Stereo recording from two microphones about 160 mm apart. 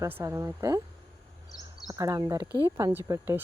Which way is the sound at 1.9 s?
20° right (ahead or behind).